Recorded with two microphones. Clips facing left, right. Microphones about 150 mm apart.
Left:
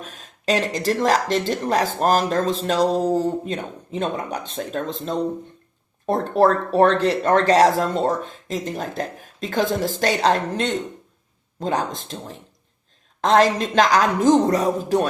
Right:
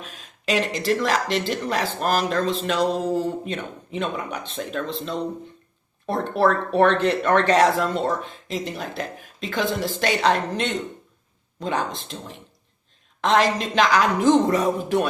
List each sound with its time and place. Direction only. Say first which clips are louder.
0.0 s speech: left 3 dB; 45° left (ahead or behind)